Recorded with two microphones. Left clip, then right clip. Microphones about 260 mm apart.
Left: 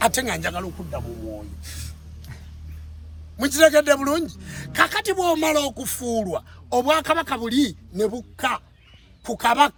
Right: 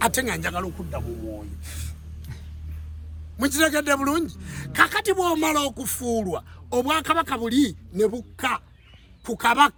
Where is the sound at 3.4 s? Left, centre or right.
Centre.